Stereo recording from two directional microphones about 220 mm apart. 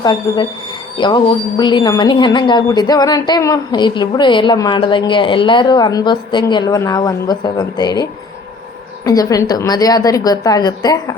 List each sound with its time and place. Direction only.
0.0 s speech: 20° left (ahead or behind)
9.0 s a woman's voice: 15° left (ahead or behind)